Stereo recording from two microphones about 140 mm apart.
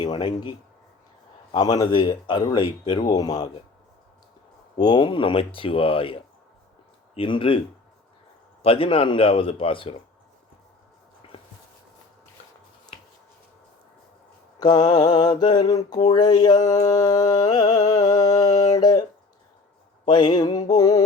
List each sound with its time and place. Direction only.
0.0 s speech: 35° left (ahead or behind)
1.5 s speech: 30° left (ahead or behind)
4.8 s speech: 30° left (ahead or behind)
8.6 s speech: 40° left (ahead or behind)
14.6 s mantra: 30° left (ahead or behind)
20.1 s mantra: 35° left (ahead or behind)